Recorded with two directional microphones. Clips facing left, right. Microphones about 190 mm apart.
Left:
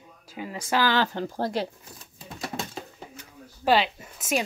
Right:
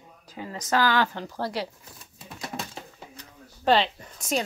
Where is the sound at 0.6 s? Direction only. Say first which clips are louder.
Even; 30° left (ahead or behind).